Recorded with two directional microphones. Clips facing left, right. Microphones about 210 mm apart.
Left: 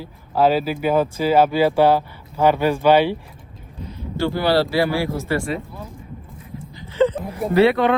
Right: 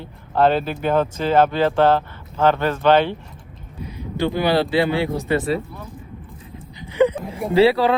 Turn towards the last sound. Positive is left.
turn(degrees=-30)  # may be behind; listen again after turning